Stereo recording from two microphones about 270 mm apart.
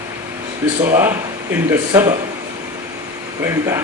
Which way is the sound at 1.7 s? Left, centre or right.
Centre.